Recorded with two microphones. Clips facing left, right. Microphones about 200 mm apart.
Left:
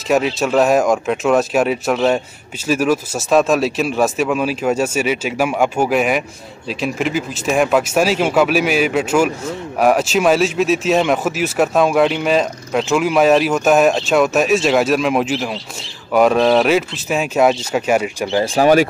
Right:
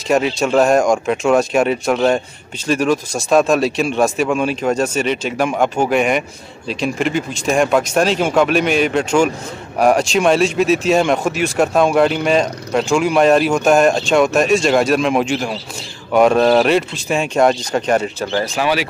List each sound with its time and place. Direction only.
0.1 s speech: centre (ahead or behind)
18.4 s speech: 30° left (ahead or behind)